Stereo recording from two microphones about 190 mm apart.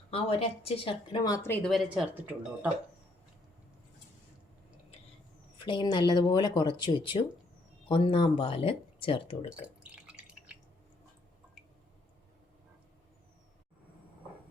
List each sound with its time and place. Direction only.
0.1 s speech: 30° left (ahead or behind); by 2.6 s 10° right (ahead or behind)
5.5 s speech: 25° left (ahead or behind)
9.8 s drip: 5° right (ahead or behind)